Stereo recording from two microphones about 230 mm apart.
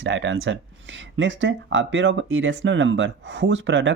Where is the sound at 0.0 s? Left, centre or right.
Right.